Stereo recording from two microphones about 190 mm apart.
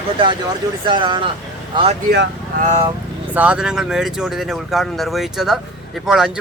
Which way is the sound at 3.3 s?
5° right (ahead or behind).